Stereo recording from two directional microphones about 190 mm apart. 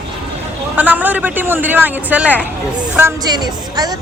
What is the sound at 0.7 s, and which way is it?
A woman's voice, 10° right (ahead or behind).